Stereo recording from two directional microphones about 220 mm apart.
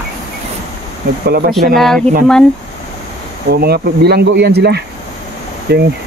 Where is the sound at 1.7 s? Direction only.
Centre (ahead or behind).